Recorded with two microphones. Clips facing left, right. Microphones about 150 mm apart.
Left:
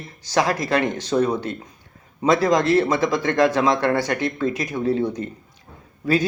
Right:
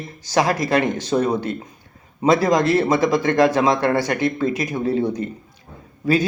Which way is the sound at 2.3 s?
5° right (ahead or behind).